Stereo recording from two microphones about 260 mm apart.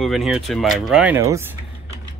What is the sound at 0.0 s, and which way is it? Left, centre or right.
Speech, centre.